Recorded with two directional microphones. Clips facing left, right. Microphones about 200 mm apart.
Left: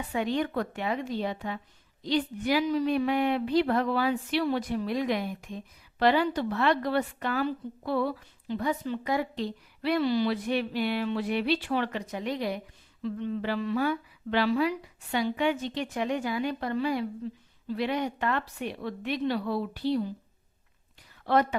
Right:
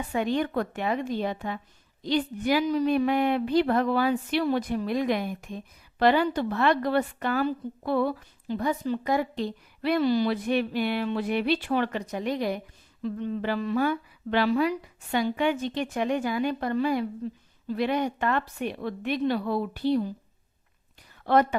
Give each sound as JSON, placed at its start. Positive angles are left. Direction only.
{"t": 0.1, "sound": "a woman's voice", "side_deg": -50}
{"t": 21.3, "sound": "a woman's voice", "side_deg": -50}